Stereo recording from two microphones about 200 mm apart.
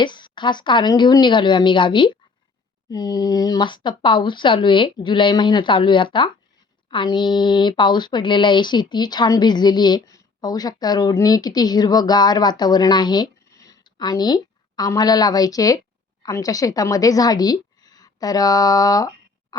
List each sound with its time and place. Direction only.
0.0 s a woman's voice: 25° left (ahead or behind)